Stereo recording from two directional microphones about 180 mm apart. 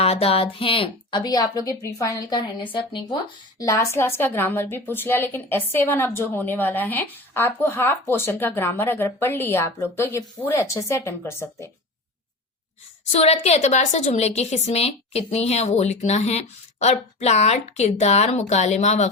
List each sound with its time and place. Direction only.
0.0 s a woman's voice: 35° left (ahead or behind); by 11.7 s 15° left (ahead or behind)
13.1 s a woman's voice: 35° left (ahead or behind)